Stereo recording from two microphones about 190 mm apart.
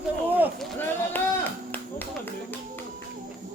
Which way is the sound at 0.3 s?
10° right (ahead or behind).